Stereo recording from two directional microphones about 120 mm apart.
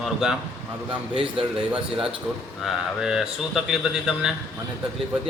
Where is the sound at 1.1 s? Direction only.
50° right (ahead or behind).